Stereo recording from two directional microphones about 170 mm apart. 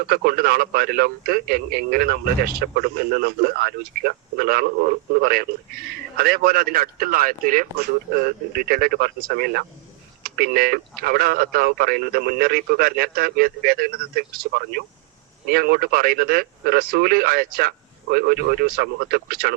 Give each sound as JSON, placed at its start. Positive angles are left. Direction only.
{"t": 0.0, "sound": "speech", "side_deg": -60}